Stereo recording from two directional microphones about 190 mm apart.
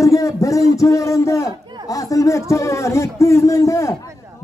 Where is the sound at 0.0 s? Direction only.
15° left (ahead or behind).